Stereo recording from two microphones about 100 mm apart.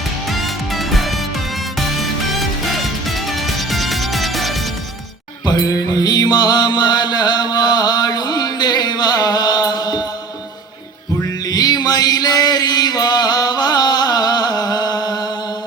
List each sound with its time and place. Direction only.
0.3 s music: centre (ahead or behind)
2.6 s music: centre (ahead or behind)
5.5 s music: 40° left (ahead or behind)
11.2 s music: 40° left (ahead or behind)